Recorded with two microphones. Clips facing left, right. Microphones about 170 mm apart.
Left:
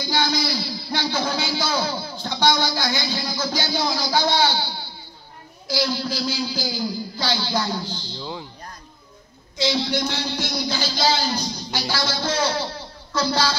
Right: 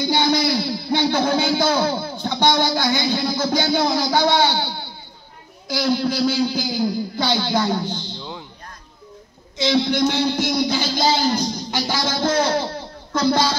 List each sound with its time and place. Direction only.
0.2 s a sound: 55° right (ahead or behind)
1.0 s speech: 55° right (ahead or behind)
8.2 s music: 5° left (ahead or behind)
9.6 s speech: 55° right (ahead or behind)